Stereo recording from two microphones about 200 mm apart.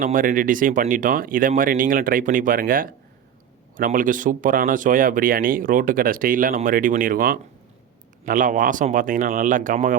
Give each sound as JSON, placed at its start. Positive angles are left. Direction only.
{"t": 0.0, "sound": "speech", "side_deg": -45}